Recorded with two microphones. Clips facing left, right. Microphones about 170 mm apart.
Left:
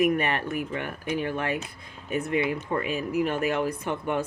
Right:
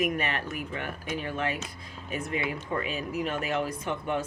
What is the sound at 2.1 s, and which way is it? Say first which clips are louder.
Speech: left 6 dB; 55° left (ahead or behind).